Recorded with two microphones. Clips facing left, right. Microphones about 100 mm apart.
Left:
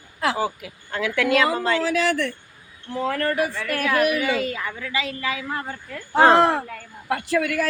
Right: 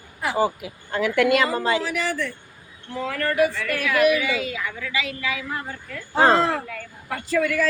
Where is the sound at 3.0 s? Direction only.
35° left (ahead or behind).